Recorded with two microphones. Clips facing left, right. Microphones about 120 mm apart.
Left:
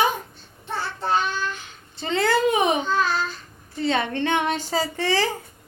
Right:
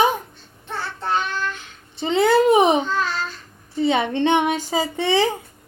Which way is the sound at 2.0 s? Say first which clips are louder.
Right 5 dB; 20° right (ahead or behind).